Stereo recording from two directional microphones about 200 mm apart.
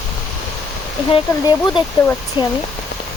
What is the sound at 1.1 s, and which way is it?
Speech, 20° left (ahead or behind).